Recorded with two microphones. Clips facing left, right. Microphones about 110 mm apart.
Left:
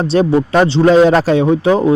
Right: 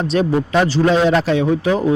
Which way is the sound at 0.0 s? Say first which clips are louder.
Left 4 dB; 35° left (ahead or behind).